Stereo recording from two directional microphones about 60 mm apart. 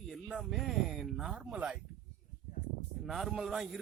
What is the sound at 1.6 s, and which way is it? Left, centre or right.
Speech, right.